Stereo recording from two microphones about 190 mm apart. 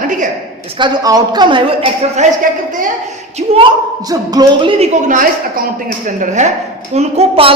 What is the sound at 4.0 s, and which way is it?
A woman's voice, 20° right (ahead or behind).